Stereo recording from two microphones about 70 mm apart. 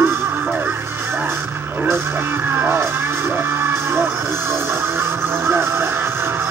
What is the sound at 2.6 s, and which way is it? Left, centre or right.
Music, right.